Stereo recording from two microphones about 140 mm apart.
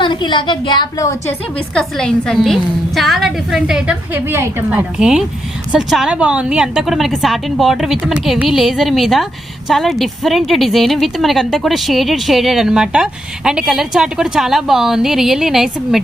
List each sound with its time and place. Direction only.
0.0 s a woman's voice: 35° left (ahead or behind)
1.7 s a woman's voice: 5° left (ahead or behind)